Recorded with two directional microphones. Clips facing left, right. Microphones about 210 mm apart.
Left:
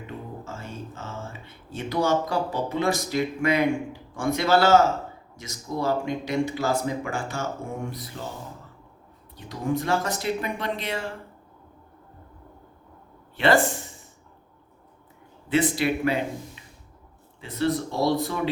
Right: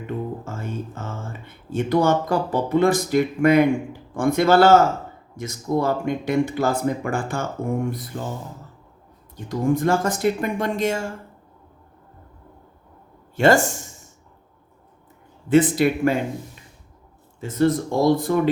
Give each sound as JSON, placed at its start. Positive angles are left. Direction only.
{"t": 0.4, "sound": "a sound", "side_deg": -50}
{"t": 4.1, "sound": "speech", "side_deg": -50}
{"t": 9.3, "sound": "speech", "side_deg": -50}
{"t": 13.3, "sound": "speech", "side_deg": -45}
{"t": 15.4, "sound": "speech", "side_deg": -50}
{"t": 17.4, "sound": "speech", "side_deg": -45}